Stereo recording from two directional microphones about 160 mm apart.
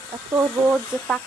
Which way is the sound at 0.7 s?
Centre (ahead or behind).